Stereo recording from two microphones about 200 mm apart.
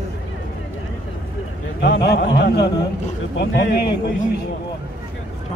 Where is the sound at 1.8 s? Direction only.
60° left (ahead or behind).